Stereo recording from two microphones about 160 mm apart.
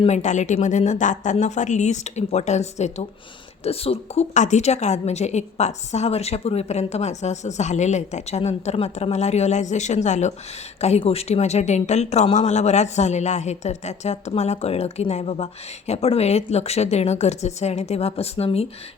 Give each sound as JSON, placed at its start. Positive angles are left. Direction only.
{"t": 0.0, "sound": "a woman's voice", "side_deg": 45}